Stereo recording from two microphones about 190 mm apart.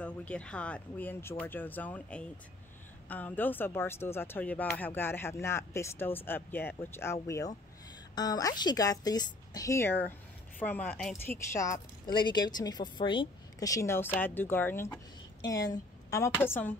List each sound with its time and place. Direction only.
0.0 s a woman's voice: 5° left (ahead or behind)
11.5 s a woman's voice: 15° left (ahead or behind)